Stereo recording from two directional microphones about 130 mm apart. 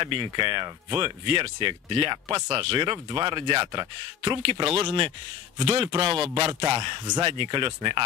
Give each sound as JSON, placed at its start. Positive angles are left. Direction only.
{"t": 0.0, "sound": "speech", "side_deg": -35}